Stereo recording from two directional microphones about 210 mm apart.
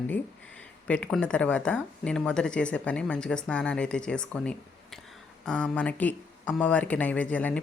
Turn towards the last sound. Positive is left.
turn(degrees=5)  # may be behind; listen again after turning